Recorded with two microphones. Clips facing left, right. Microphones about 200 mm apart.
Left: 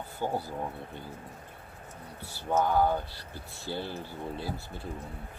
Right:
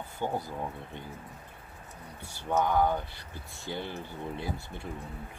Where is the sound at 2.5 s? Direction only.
5° left (ahead or behind).